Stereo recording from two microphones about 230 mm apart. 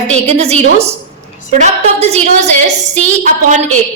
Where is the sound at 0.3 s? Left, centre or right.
Right.